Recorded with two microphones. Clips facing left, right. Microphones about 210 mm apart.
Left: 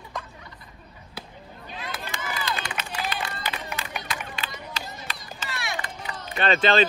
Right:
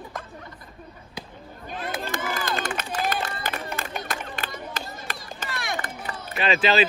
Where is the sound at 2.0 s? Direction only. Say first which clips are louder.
Right 4 dB; 50° right (ahead or behind).